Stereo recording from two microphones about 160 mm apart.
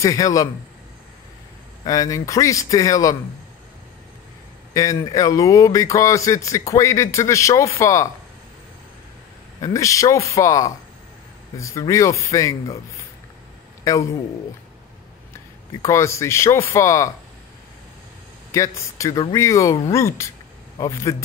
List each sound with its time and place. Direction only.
0.0 s speech: 20° left (ahead or behind)
1.9 s speech: 20° left (ahead or behind)
4.7 s speech: 20° left (ahead or behind)
9.6 s speech: 20° left (ahead or behind)
15.8 s speech: 20° left (ahead or behind)
18.5 s speech: 20° left (ahead or behind)